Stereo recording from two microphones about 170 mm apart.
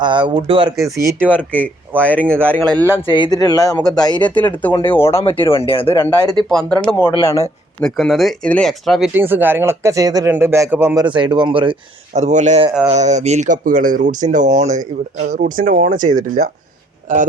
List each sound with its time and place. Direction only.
0.0 s speech: 25° right (ahead or behind)
0.9 s speech: 15° right (ahead or behind)
2.6 s speech: 10° left (ahead or behind)
3.1 s speech: 25° left (ahead or behind)
4.4 s speech: 10° left (ahead or behind)
5.2 s speech: 30° left (ahead or behind)
5.9 s speech: 15° left (ahead or behind)
6.5 s speech: 5° left (ahead or behind)
7.8 s speech: 5° left (ahead or behind); by 11.0 s 15° right (ahead or behind)
11.0 s speech: 30° right (ahead or behind); by 17.2 s 50° right (ahead or behind)